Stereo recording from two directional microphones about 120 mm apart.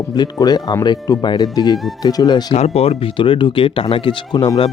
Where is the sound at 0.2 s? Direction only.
35° left (ahead or behind).